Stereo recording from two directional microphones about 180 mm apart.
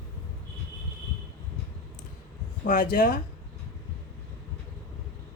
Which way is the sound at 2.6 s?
55° left (ahead or behind).